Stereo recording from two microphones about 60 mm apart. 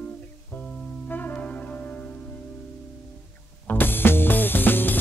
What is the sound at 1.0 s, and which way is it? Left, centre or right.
Music, left.